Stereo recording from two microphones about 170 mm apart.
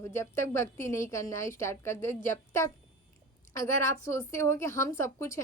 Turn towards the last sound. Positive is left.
turn(degrees=15)  # may be behind; listen again after turning